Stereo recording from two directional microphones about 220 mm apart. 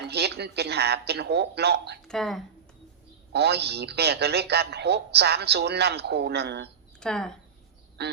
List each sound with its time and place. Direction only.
0.1 s a man's voice: 50° right (ahead or behind)
2.0 s speech: centre (ahead or behind)
3.3 s a man's voice: 50° right (ahead or behind)
7.0 s speech: 5° left (ahead or behind)
8.0 s a man's voice: 50° right (ahead or behind)